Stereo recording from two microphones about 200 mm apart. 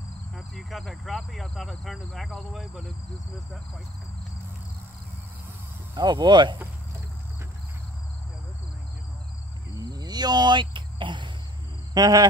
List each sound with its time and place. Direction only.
0.6 s speech: centre (ahead or behind)
5.9 s speech: 20° right (ahead or behind)
9.8 s cricket: 20° right (ahead or behind)
11.9 s speech: 20° right (ahead or behind)